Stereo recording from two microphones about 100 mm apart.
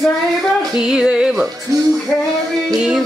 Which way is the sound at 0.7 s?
5° right (ahead or behind).